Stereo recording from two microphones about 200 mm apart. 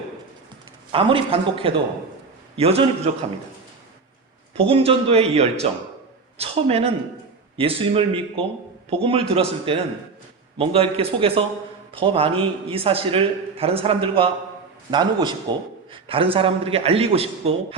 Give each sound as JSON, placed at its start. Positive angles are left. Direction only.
{"t": 0.9, "sound": "a man's voice", "side_deg": -25}
{"t": 4.5, "sound": "a man's voice", "side_deg": -30}